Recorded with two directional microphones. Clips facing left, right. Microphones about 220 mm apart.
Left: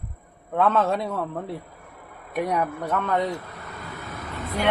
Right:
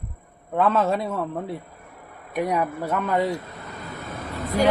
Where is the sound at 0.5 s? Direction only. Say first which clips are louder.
Right 1 dB; 5° right (ahead or behind).